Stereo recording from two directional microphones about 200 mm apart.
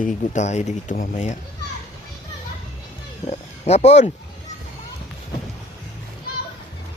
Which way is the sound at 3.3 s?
30° left (ahead or behind).